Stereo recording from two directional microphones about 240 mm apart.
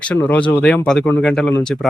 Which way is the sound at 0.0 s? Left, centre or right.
Centre.